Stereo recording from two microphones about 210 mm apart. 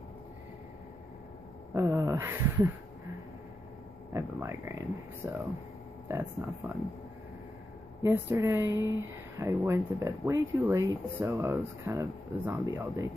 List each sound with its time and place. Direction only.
1.7 s a sound: 15° right (ahead or behind)
4.1 s speech: 15° right (ahead or behind)
8.0 s speech: 10° right (ahead or behind)